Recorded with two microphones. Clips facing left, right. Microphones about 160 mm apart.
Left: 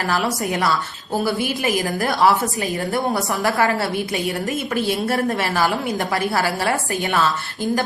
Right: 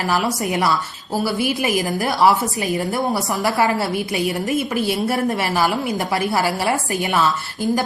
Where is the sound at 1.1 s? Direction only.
5° right (ahead or behind).